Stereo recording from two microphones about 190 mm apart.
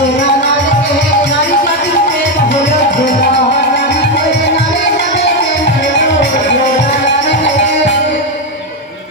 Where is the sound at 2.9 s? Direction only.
45° left (ahead or behind).